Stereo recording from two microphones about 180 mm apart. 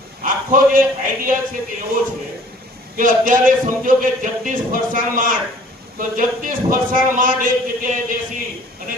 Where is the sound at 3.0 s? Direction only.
50° right (ahead or behind).